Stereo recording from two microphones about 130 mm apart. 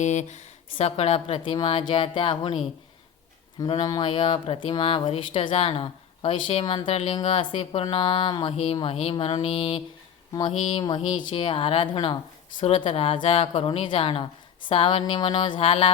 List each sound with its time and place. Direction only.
0.0 s speech: 65° left (ahead or behind); by 2.6 s 45° left (ahead or behind)
3.7 s speech: 35° left (ahead or behind); by 10.8 s 50° left (ahead or behind)
10.8 s speech: 40° left (ahead or behind)